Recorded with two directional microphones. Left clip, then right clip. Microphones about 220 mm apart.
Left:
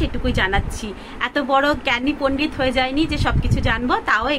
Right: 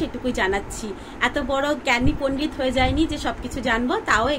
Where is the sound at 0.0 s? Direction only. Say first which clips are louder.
Left 2 dB; 10° left (ahead or behind).